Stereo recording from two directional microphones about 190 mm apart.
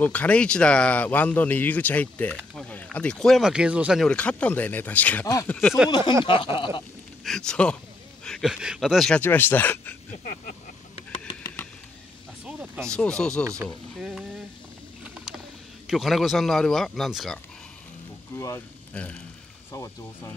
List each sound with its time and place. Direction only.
0.0 s speech: 10° left (ahead or behind)
5.6 s speech: centre (ahead or behind)
5.9 s a sound: 20° left (ahead or behind)
7.2 s speech: 5° left (ahead or behind)
10.1 s vehicle: 40° left (ahead or behind)
11.0 s a sound: 20° left (ahead or behind)
12.4 s music: 5° right (ahead or behind)
12.9 s speech: 5° left (ahead or behind)
13.4 s speech: 15° right (ahead or behind)
13.9 s speech: centre (ahead or behind)
15.9 s speech: centre (ahead or behind)
18.3 s speech: 15° left (ahead or behind)